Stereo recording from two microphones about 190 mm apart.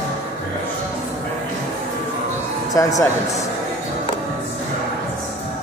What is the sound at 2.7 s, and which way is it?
Speech, 15° left (ahead or behind).